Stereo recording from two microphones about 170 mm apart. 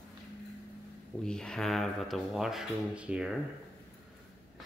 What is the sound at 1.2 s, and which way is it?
Speech, 5° left (ahead or behind).